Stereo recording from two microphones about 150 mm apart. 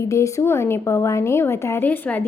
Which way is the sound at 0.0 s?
20° left (ahead or behind).